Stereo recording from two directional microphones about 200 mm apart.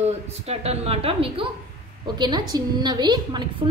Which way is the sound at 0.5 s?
30° right (ahead or behind).